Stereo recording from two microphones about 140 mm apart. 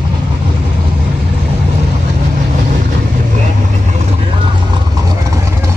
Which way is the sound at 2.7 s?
80° right.